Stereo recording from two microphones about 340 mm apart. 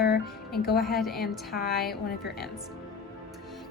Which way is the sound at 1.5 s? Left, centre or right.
Left.